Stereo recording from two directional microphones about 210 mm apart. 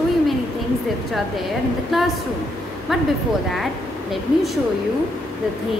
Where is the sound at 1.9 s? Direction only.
Centre (ahead or behind).